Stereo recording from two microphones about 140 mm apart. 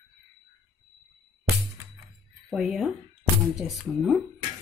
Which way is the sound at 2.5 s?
Centre (ahead or behind).